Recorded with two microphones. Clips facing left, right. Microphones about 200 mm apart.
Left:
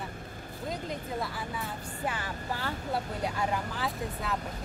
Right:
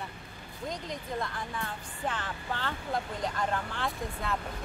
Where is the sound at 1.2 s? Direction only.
5° left (ahead or behind).